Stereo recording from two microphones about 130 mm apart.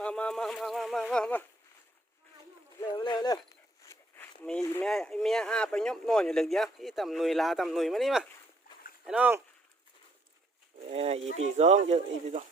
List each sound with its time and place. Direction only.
0.0 s speech: 10° left (ahead or behind)
2.9 s speech: 35° left (ahead or behind)
4.2 s a sound: 5° left (ahead or behind)
4.8 s speech: 5° left (ahead or behind)
9.0 s speech: 10° right (ahead or behind)
10.9 s speech: 50° right (ahead or behind); by 12.5 s 65° right (ahead or behind)